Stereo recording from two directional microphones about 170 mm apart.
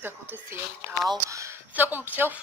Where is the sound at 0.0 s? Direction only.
15° right (ahead or behind).